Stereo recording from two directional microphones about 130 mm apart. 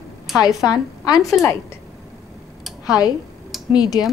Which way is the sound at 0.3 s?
Centre (ahead or behind).